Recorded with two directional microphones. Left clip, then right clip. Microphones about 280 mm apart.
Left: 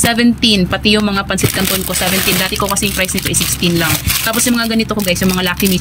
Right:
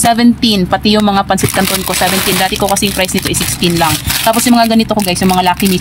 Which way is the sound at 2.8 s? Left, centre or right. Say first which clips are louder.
Right 3 dB; centre.